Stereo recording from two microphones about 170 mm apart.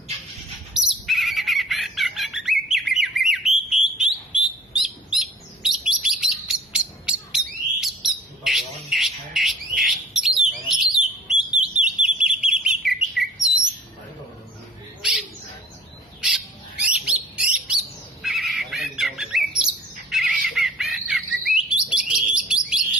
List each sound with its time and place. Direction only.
0.8 s bird: centre (ahead or behind)
8.0 s squawk: centre (ahead or behind)
12.8 s bird: centre (ahead or behind)
16.8 s bird: 5° right (ahead or behind)
18.2 s squawk: centre (ahead or behind)
20.1 s bird: centre (ahead or behind)